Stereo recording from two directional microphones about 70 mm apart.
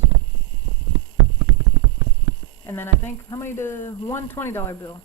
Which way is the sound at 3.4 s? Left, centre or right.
Left.